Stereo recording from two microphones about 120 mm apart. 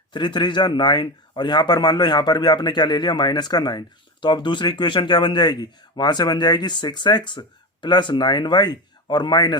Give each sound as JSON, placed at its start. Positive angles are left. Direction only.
{"t": 0.1, "sound": "speech", "side_deg": 40}